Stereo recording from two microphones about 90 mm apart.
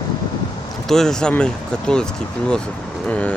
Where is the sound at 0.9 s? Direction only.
5° left (ahead or behind).